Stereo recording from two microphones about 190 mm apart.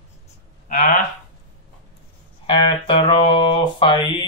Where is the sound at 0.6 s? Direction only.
40° left (ahead or behind).